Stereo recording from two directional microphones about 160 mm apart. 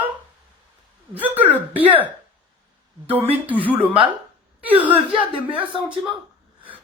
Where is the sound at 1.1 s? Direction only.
10° right (ahead or behind).